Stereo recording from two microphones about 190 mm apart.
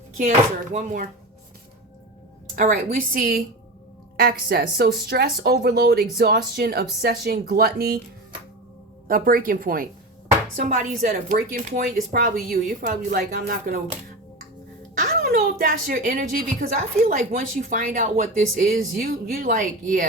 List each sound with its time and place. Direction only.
0.2 s speech: 40° right (ahead or behind)
2.6 s speech: 45° right (ahead or behind)
9.0 s speech: 50° right (ahead or behind)
14.9 s speech: 50° right (ahead or behind)